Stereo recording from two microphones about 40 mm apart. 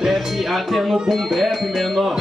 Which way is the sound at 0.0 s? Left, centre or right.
Centre.